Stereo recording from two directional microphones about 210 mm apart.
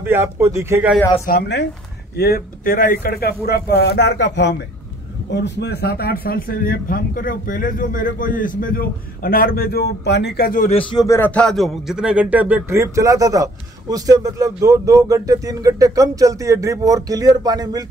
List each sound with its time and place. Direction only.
0.0 s speech: 10° right (ahead or behind)
1.2 s speech: 50° left (ahead or behind)
10.8 s speech: 20° left (ahead or behind); by 17.8 s 20° right (ahead or behind)